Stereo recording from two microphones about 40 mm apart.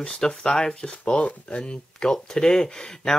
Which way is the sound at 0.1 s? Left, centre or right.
Centre.